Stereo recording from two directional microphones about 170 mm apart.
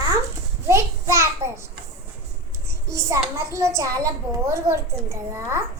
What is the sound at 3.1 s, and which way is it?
A child's voice, 20° right (ahead or behind).